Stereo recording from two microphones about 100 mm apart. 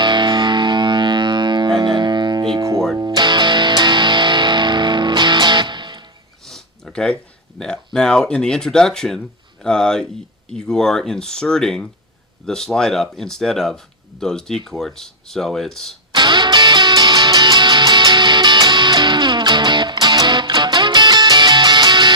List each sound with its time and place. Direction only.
0.0 s music: 50° right (ahead or behind)
2.6 s music: 30° right (ahead or behind)
3.0 s music: 50° right (ahead or behind)
6.4 s a sound: 5° left (ahead or behind)
7.9 s speech: 5° left (ahead or behind)
16.1 s music: 50° right (ahead or behind)